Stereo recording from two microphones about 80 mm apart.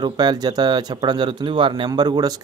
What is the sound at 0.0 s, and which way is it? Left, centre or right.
Speech, right.